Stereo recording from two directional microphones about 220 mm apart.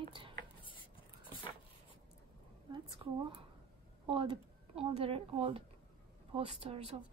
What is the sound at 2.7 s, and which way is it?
Speech, 20° right (ahead or behind).